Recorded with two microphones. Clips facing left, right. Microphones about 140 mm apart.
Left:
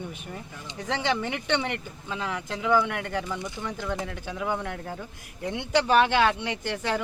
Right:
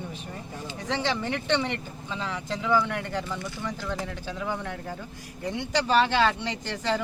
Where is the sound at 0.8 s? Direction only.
15° left (ahead or behind).